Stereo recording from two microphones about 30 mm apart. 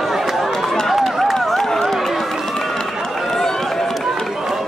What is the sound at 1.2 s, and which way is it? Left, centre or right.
Run, centre.